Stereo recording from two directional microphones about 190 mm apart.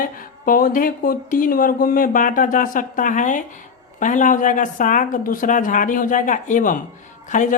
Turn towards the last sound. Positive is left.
turn(degrees=40)  # may be behind; listen again after turning